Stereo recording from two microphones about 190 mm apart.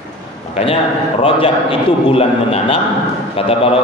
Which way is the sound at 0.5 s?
30° left (ahead or behind).